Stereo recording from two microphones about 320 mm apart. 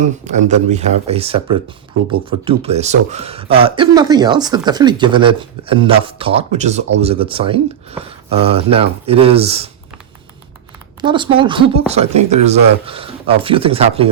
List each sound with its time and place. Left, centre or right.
0.0 s speech: right
11.0 s speech: centre